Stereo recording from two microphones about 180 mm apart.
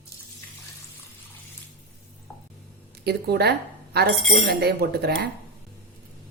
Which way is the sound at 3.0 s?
60° right (ahead or behind).